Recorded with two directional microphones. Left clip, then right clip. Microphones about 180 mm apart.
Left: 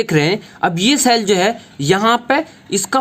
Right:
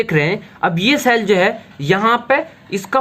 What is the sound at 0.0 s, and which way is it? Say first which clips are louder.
Speech: left 1 dB; 60° left (ahead or behind).